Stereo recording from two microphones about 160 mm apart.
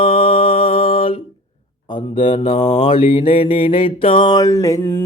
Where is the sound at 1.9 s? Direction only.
30° left (ahead or behind).